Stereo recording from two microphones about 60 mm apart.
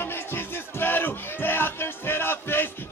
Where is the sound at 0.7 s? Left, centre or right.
Left.